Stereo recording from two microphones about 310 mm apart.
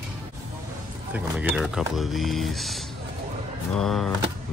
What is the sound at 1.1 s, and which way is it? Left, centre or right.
Speech, centre.